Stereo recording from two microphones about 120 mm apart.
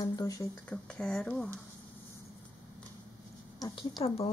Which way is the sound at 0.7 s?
10° left (ahead or behind).